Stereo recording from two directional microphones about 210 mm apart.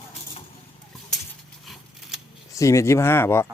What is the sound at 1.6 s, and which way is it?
Scissors, centre (ahead or behind).